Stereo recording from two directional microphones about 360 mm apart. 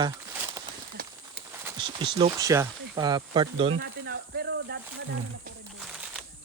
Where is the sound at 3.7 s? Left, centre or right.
Right.